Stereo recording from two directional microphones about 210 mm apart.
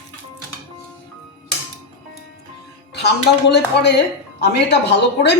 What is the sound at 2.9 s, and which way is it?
Speech, 50° left (ahead or behind).